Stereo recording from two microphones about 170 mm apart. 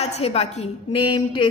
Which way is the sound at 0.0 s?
40° left (ahead or behind).